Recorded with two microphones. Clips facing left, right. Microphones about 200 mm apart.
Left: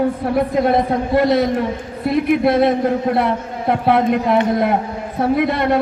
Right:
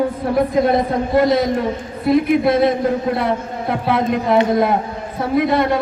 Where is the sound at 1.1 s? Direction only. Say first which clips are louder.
Even; 60° left (ahead or behind).